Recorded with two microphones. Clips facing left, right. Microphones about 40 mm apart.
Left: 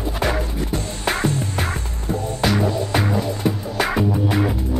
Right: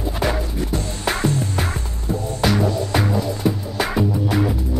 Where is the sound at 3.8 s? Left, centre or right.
Left.